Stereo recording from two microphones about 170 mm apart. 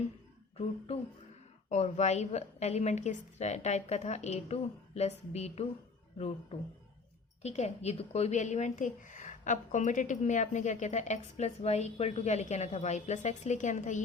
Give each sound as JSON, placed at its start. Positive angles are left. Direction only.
{"t": 1.7, "sound": "a woman's voice", "side_deg": 40}